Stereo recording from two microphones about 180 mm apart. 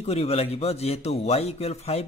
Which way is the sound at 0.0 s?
35° left (ahead or behind).